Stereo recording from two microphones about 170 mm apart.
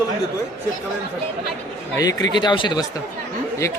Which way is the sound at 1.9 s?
20° left (ahead or behind).